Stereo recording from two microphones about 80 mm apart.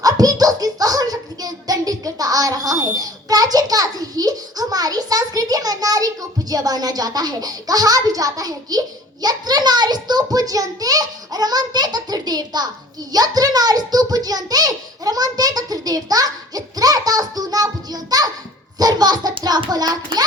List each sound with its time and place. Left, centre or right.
0.0 s music: right
6.5 s a child's voice: right
13.1 s a sound: right
18.8 s a child's voice: right